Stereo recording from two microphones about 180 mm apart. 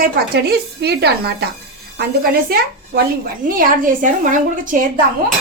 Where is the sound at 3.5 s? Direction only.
50° right (ahead or behind).